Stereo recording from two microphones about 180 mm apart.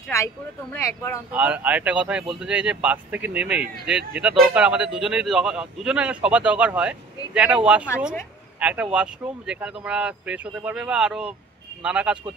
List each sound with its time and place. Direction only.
0.1 s speech: 15° left (ahead or behind)
1.3 s speech: 10° right (ahead or behind)